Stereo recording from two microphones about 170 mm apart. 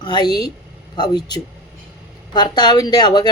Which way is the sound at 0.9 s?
25° left (ahead or behind).